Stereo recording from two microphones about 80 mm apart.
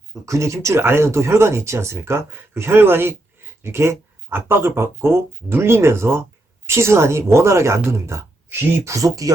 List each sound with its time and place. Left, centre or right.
0.3 s speech: right